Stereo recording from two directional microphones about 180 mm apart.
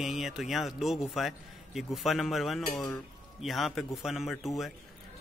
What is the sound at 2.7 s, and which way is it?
Speech, 15° left (ahead or behind).